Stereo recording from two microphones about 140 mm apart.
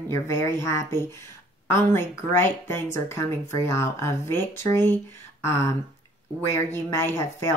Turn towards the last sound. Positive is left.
turn(degrees=20)  # may be behind; listen again after turning